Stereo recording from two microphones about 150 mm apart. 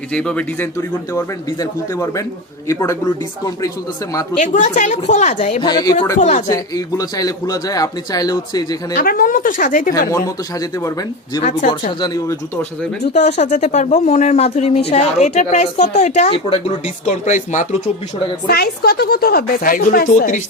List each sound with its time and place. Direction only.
0.1 s speech: 5° left (ahead or behind)
0.8 s speech: 20° left (ahead or behind)
4.1 s speech: 20° left (ahead or behind)
4.4 s a woman's voice: 55° left (ahead or behind)
5.6 s speech: 25° left (ahead or behind)
6.1 s speech: 50° left (ahead or behind)
6.5 s speech: 25° left (ahead or behind)
9.0 s a woman's voice: 70° left (ahead or behind)
10.1 s speech: 20° left (ahead or behind)
13.1 s speech: 50° left (ahead or behind)
17.1 s speech: 55° left (ahead or behind)
18.4 s speech: 90° left; by 20.4 s 65° left (ahead or behind)